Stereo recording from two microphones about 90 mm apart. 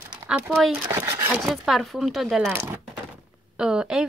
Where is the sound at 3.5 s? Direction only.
10° right (ahead or behind).